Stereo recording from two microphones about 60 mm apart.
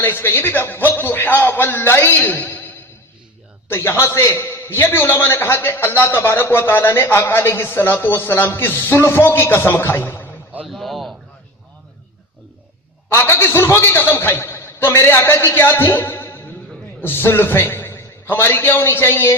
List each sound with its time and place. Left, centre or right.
0.0 s a man's voice: left
2.2 s a sound: left
3.7 s a man's voice: left
10.7 s a man's voice: centre
13.1 s a man's voice: left